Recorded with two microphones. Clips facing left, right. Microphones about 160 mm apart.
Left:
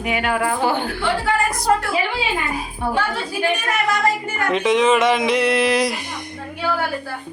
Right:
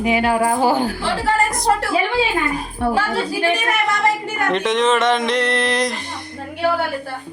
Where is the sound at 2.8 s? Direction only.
65° right (ahead or behind).